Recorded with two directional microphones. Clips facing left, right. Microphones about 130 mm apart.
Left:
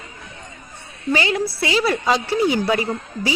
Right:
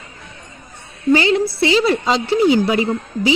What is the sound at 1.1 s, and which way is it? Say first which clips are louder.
A woman's voice: right 6 dB; 30° right (ahead or behind).